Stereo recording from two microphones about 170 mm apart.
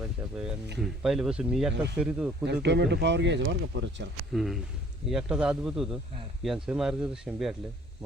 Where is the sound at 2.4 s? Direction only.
90° right.